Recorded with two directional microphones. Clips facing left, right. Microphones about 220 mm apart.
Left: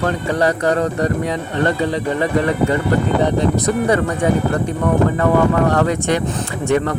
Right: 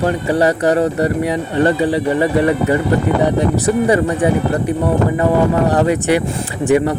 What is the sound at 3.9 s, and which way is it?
Speech, 10° right (ahead or behind).